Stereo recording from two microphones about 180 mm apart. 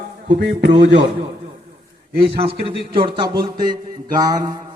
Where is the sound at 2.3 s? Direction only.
30° right (ahead or behind).